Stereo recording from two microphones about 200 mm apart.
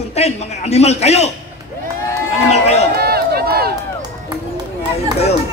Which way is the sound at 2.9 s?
50° right (ahead or behind).